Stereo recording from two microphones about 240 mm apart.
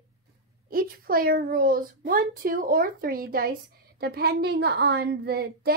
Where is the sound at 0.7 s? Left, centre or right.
Right.